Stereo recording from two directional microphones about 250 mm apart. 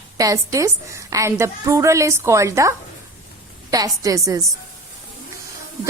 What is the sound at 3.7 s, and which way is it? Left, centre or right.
Speech, centre.